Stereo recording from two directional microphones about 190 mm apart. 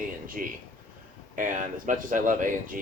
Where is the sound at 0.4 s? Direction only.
45° right (ahead or behind).